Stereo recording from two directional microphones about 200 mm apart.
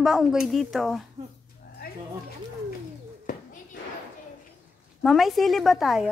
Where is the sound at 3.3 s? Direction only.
40° left (ahead or behind).